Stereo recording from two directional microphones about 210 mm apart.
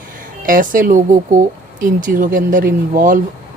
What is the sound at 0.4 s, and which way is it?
Speech, 40° right (ahead or behind).